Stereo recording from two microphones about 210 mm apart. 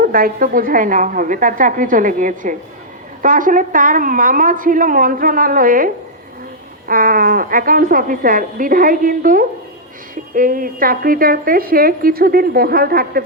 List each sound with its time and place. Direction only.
0.1 s a woman's voice: 45° right (ahead or behind)